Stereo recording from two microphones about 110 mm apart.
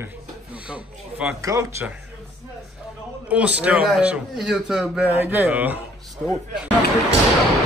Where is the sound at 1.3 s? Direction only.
30° right (ahead or behind).